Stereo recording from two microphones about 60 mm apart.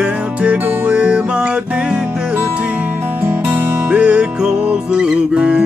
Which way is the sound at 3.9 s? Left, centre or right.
Right.